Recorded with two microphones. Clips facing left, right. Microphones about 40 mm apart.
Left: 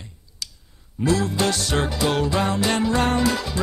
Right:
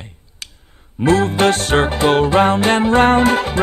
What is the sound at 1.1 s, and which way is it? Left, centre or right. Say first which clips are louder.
Music: right 8 dB; right.